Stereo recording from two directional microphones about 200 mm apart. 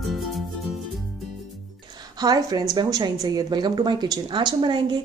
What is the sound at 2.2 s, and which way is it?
A woman's voice, 20° right (ahead or behind).